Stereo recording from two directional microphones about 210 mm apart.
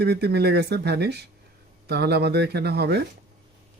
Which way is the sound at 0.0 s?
50° right (ahead or behind).